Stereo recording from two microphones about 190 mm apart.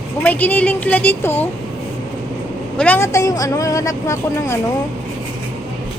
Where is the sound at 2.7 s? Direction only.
5° left (ahead or behind).